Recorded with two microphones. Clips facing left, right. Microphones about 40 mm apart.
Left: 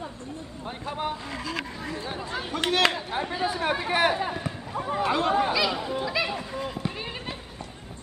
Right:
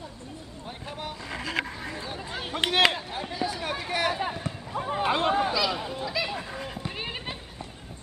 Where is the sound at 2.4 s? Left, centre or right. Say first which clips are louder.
Right 1 dB; right.